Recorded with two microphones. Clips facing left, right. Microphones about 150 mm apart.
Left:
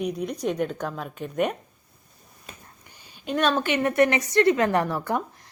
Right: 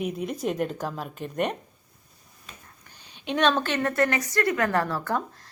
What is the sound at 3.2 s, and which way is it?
A woman's voice, 5° left (ahead or behind).